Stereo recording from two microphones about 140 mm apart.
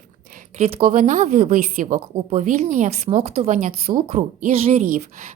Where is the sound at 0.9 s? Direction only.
60° right (ahead or behind).